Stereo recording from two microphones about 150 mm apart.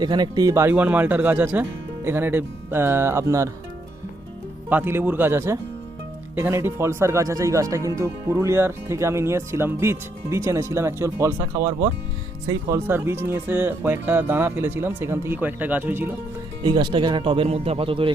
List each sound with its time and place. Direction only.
0.0 s speech: 30° right (ahead or behind)
4.7 s speech: 15° right (ahead or behind)
12.5 s speech: 20° right (ahead or behind)
16.6 s speech: 30° right (ahead or behind)